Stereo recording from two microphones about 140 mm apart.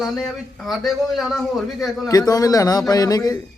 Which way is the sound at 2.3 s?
25° left (ahead or behind).